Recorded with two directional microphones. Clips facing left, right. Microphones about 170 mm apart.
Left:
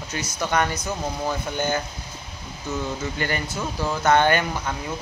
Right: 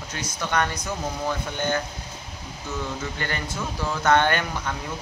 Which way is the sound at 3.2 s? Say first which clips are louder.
Left 3 dB; 5° left (ahead or behind).